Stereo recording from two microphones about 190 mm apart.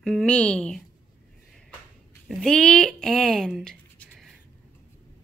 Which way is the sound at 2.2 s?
5° left (ahead or behind).